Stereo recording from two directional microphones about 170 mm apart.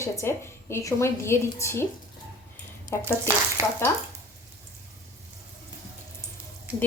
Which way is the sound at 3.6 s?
15° right (ahead or behind).